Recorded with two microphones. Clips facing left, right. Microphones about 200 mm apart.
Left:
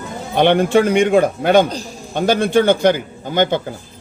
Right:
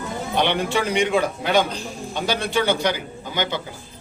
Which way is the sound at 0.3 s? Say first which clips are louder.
Left 9 dB; 50° left (ahead or behind).